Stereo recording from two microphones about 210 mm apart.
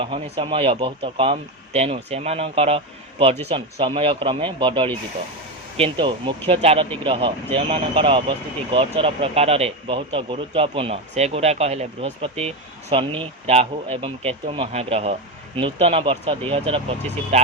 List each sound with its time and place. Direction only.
0.0 s speech: 25° right (ahead or behind)